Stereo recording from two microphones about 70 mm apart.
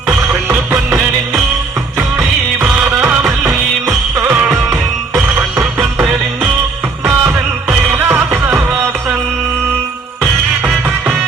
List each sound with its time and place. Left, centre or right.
2.0 s music: right
3.2 s music: right
7.0 s music: right
10.2 s music: centre